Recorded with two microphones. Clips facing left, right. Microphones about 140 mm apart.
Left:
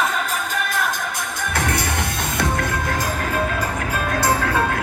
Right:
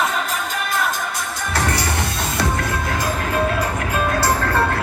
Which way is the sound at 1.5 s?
55° left (ahead or behind).